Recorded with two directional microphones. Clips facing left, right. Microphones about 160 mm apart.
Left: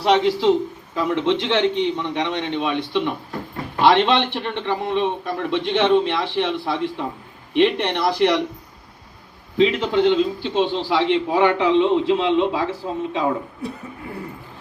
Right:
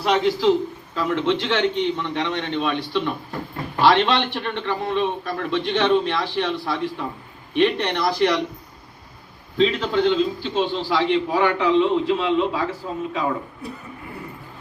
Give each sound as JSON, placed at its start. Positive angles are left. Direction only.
{"t": 0.0, "sound": "a man's voice", "side_deg": 25}
{"t": 9.8, "sound": "a man's voice", "side_deg": 20}